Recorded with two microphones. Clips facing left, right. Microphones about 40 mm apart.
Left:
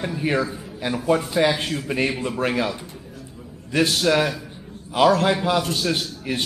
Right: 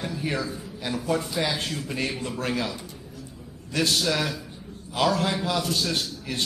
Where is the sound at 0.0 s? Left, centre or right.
Left.